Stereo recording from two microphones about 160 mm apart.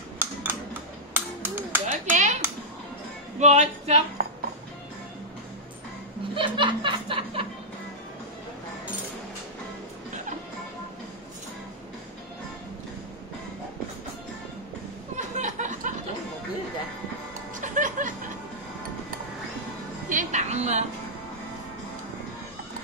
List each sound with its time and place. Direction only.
0.2 s a sound: 10° right (ahead or behind)
1.9 s a sound: 50° right (ahead or behind)
3.3 s speech: 45° right (ahead or behind)
6.3 s music: 30° right (ahead or behind)
15.1 s music: 50° right (ahead or behind)
17.6 s music: 55° right (ahead or behind)
20.1 s music: 50° right (ahead or behind)